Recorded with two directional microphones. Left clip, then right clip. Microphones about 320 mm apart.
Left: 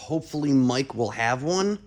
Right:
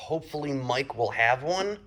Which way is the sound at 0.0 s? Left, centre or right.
Left.